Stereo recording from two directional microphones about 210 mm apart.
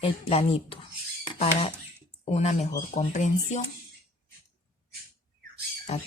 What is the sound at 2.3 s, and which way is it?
Speech, 30° left (ahead or behind).